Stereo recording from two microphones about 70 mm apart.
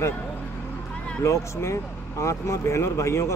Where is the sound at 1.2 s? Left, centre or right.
Left.